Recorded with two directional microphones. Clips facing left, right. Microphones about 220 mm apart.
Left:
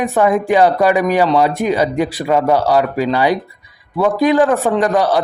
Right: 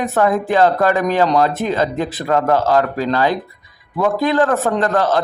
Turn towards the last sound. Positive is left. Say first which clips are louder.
# left 2 dB
turn(degrees=15)  # may be behind; listen again after turning